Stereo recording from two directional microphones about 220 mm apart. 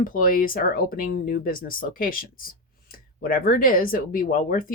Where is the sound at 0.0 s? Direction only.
40° left (ahead or behind).